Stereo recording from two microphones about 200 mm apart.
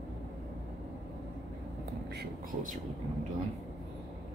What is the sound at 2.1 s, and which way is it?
Speech, 40° right (ahead or behind).